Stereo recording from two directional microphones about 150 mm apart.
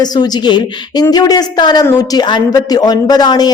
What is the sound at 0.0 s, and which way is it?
Speech, 30° left (ahead or behind).